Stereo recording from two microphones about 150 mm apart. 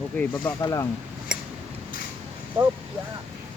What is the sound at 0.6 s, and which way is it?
Speech, 20° left (ahead or behind).